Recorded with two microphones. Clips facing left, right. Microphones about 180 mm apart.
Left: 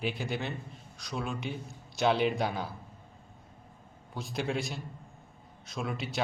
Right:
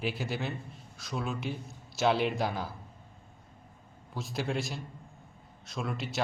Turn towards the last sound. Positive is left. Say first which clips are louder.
# even
turn(degrees=0)  # may be behind; listen again after turning